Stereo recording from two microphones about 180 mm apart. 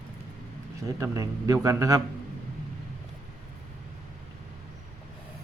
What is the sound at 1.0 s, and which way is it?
A man's voice, 20° right (ahead or behind).